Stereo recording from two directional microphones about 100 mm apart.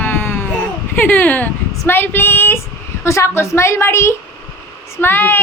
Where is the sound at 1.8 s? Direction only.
20° left (ahead or behind).